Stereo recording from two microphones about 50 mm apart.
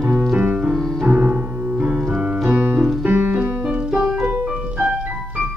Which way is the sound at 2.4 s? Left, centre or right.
Right.